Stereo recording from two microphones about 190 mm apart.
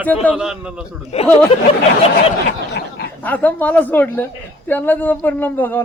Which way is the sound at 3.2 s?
10° left (ahead or behind).